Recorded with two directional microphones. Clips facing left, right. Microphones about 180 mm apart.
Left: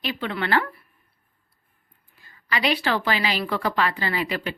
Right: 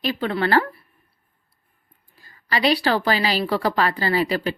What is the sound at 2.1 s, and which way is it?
A woman's voice, 35° right (ahead or behind).